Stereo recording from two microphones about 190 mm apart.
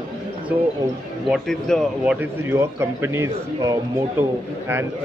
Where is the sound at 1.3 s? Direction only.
5° left (ahead or behind).